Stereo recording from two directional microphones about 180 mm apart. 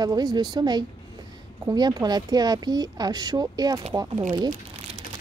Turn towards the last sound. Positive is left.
turn(degrees=-20)  # may be behind; listen again after turning